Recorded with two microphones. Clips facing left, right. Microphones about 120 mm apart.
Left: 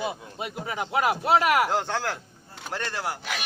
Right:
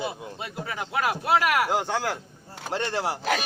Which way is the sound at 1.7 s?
10° right (ahead or behind).